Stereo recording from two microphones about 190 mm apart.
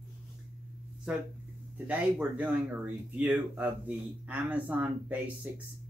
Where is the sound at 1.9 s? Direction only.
5° right (ahead or behind).